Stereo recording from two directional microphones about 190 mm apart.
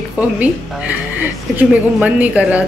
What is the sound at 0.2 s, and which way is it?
A woman's voice, 10° right (ahead or behind).